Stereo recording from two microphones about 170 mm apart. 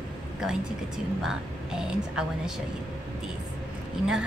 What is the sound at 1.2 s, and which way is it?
Speech, 5° right (ahead or behind).